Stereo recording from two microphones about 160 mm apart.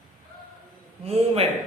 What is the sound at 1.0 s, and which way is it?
Speech, 40° right (ahead or behind).